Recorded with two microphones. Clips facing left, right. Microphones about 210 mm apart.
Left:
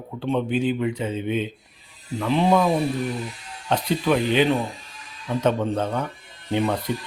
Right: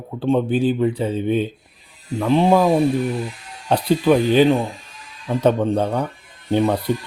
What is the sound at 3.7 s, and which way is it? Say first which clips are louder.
Speech: right 5 dB; 35° right (ahead or behind).